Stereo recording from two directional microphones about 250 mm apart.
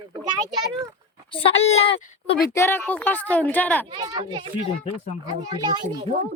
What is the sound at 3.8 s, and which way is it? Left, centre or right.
Speech, centre.